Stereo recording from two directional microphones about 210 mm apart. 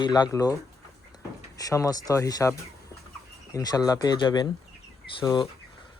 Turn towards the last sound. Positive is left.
turn(degrees=20)  # may be behind; listen again after turning